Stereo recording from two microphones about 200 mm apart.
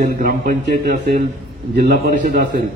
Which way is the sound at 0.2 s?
45° right (ahead or behind).